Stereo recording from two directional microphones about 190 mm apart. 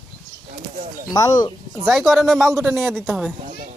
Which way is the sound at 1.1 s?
20° left (ahead or behind).